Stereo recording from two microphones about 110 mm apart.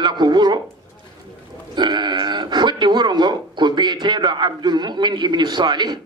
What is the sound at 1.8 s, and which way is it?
A man's voice, 40° right (ahead or behind).